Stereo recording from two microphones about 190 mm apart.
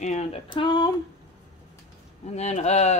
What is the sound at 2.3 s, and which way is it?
Speech, 35° left (ahead or behind).